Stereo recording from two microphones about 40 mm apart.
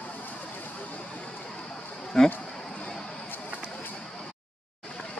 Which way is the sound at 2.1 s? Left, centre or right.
Centre.